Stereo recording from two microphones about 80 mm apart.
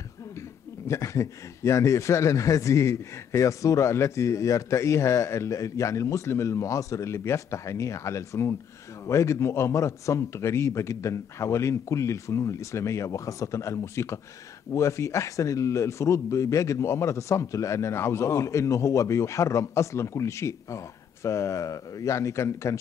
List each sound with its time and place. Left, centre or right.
0.8 s a man's voice: left